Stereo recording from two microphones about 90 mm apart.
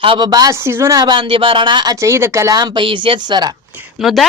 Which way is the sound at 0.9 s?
55° right (ahead or behind).